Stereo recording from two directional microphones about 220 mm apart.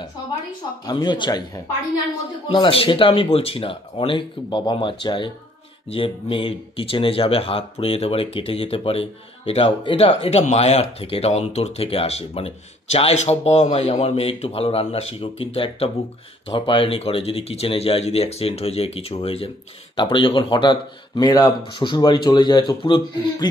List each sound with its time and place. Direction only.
0.8 s speech: 20° left (ahead or behind)